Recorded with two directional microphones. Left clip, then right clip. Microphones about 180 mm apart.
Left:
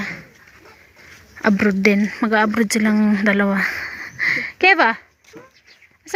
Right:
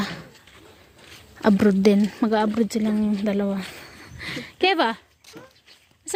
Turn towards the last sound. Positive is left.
turn(degrees=0)  # may be behind; listen again after turning